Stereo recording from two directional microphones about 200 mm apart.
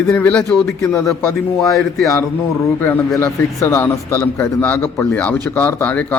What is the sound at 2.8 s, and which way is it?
Speech, 10° left (ahead or behind).